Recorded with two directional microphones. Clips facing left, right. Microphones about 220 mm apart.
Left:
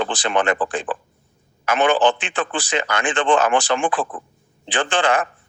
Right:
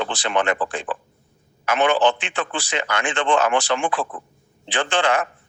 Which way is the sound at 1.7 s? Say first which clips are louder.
Left 1 dB; 35° left (ahead or behind).